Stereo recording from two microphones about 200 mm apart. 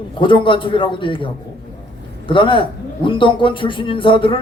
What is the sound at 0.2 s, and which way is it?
Speech, 25° left (ahead or behind).